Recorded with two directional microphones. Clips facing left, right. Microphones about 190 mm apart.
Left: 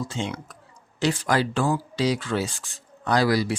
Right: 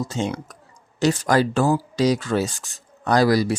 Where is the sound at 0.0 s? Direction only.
40° right (ahead or behind).